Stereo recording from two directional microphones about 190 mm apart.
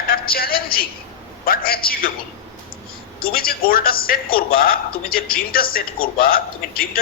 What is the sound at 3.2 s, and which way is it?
Speech, 50° left (ahead or behind).